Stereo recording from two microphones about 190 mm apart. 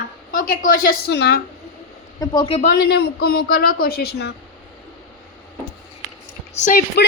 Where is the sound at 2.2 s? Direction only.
25° left (ahead or behind).